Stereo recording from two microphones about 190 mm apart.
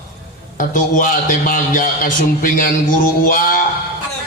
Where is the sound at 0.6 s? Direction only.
45° left (ahead or behind).